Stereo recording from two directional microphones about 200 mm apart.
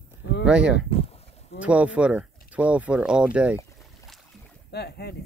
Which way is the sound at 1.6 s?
5° right (ahead or behind).